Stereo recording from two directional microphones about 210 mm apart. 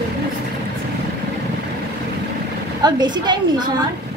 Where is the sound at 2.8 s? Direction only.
20° right (ahead or behind).